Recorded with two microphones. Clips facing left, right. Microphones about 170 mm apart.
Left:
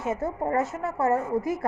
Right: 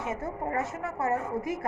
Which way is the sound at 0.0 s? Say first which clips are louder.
Left 5 dB; 25° left (ahead or behind).